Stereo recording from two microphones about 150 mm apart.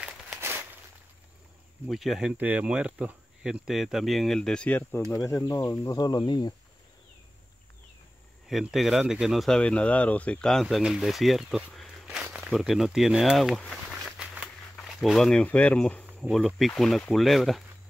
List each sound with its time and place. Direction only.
0.4 s a sound: 15° right (ahead or behind)
1.9 s speech: centre (ahead or behind)
5.1 s speech: 20° left (ahead or behind)
8.5 s speech: centre (ahead or behind)